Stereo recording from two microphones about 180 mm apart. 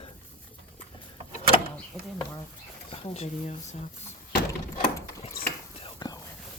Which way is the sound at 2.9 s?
30° left (ahead or behind).